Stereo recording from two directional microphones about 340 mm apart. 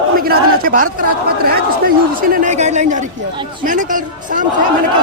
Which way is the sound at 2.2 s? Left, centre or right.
Right.